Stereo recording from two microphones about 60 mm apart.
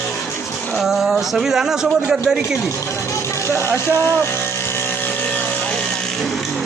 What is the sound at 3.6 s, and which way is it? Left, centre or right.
Vehicle, left.